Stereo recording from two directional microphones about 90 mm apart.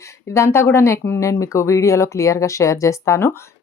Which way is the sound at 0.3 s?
30° left (ahead or behind).